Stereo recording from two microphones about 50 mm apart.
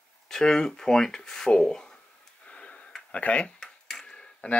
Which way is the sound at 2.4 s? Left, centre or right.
Left.